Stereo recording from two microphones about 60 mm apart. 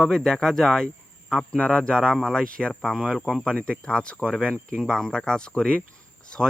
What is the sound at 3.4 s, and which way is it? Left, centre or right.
Speech, centre.